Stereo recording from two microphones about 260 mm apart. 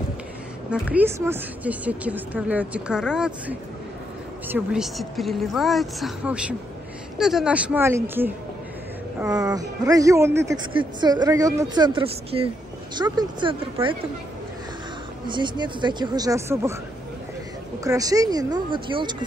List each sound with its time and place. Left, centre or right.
0.7 s a woman's voice: centre
15.2 s speech: centre
17.8 s speech: centre